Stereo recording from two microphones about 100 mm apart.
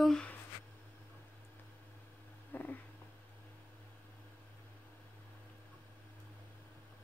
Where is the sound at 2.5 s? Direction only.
20° left (ahead or behind).